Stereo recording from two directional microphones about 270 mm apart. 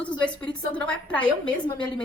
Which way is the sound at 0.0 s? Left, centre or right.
Centre.